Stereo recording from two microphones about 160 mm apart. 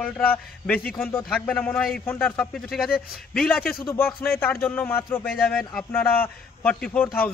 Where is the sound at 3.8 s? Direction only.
15° left (ahead or behind).